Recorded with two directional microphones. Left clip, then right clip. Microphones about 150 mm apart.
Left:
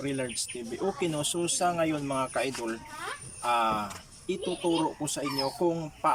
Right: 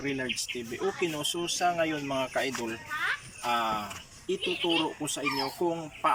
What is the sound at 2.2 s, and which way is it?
Speech, 5° left (ahead or behind).